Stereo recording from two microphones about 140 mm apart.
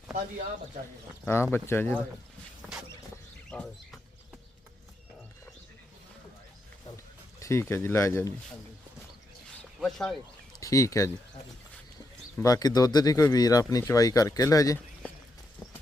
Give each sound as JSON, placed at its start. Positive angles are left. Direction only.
{"t": 1.2, "sound": "speech", "side_deg": 15}
{"t": 3.5, "sound": "speech", "side_deg": 10}
{"t": 6.9, "sound": "speech", "side_deg": 20}
{"t": 9.8, "sound": "speech", "side_deg": 0}
{"t": 10.6, "sound": "speech", "side_deg": 20}
{"t": 12.4, "sound": "speech", "side_deg": 25}